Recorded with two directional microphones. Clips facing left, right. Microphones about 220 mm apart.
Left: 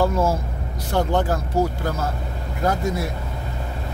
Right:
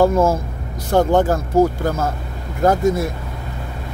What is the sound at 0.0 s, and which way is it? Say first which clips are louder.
Speech: right 5 dB; 50° right (ahead or behind).